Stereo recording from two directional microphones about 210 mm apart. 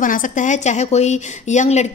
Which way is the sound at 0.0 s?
40° left (ahead or behind).